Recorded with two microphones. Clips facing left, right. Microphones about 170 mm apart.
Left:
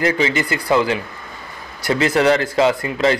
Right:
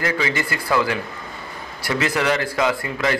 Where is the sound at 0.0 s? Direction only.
20° left (ahead or behind).